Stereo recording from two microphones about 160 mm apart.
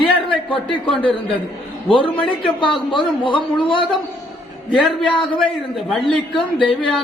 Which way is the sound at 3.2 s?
30° left (ahead or behind).